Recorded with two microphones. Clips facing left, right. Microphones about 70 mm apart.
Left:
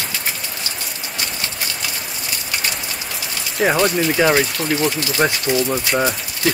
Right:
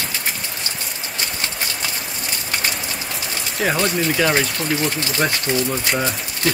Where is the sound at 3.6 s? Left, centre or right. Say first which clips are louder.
Left 4 dB; centre.